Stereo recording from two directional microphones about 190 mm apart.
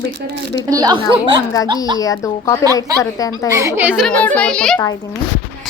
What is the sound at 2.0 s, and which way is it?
Speech, 15° left (ahead or behind).